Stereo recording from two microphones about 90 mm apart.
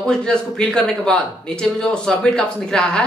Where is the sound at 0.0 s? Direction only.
10° left (ahead or behind).